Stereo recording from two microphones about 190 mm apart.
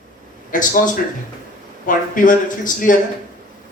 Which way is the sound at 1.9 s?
45° left (ahead or behind).